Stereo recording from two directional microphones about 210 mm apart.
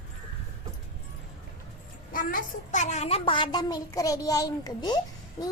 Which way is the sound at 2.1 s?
40° left (ahead or behind).